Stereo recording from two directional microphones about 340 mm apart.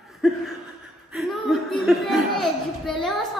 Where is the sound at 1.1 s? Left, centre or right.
Centre.